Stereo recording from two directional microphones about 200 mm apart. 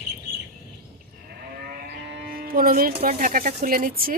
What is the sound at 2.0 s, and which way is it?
Speech, 55° right (ahead or behind).